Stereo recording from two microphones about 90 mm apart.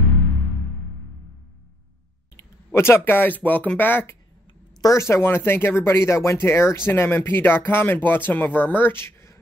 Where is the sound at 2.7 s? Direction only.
30° left (ahead or behind).